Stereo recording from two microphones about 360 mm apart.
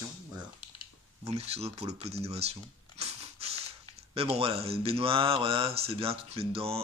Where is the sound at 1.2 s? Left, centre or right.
Centre.